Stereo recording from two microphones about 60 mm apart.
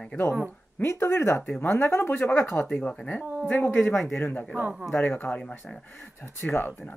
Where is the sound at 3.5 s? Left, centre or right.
Left.